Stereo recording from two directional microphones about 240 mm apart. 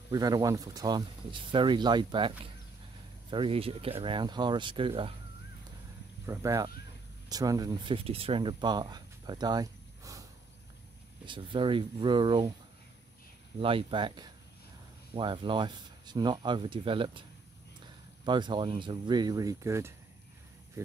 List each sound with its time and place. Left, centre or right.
0.1 s speech: centre
6.2 s speech: centre
11.2 s speech: centre
13.6 s speech: right
18.2 s speech: centre